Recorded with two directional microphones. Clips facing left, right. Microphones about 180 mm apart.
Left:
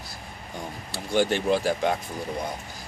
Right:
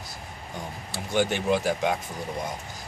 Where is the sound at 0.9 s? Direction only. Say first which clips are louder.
Left 2 dB; 20° right (ahead or behind).